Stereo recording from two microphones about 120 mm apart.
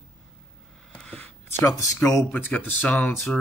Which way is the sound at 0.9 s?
10° left (ahead or behind).